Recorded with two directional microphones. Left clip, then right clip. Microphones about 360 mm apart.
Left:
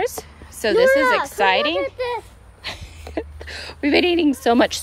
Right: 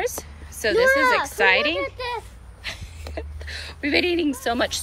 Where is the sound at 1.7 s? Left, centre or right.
Left.